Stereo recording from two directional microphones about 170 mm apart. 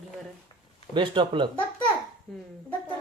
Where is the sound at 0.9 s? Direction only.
30° right (ahead or behind).